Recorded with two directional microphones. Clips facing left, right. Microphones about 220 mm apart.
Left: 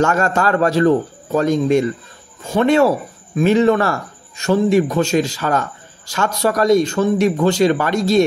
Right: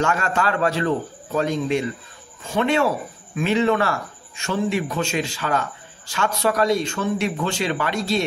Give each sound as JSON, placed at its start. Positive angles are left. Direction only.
{"t": 0.0, "sound": "a man's voice", "side_deg": 45}